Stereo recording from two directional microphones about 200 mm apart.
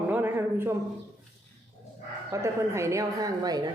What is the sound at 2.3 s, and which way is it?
A woman's voice, 15° right (ahead or behind).